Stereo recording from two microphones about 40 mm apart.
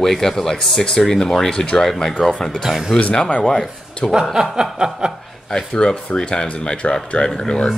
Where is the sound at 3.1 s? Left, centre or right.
Left.